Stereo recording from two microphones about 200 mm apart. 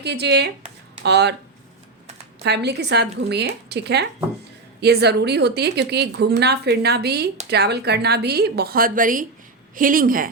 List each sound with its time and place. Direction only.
0.0 s a woman's voice: 55° right (ahead or behind)
2.4 s a woman's voice: 55° right (ahead or behind)